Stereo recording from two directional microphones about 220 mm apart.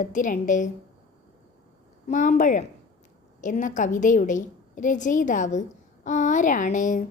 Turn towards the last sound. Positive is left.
turn(degrees=35)  # may be behind; listen again after turning